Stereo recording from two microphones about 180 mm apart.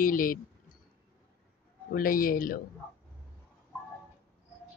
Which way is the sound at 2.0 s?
50° left (ahead or behind).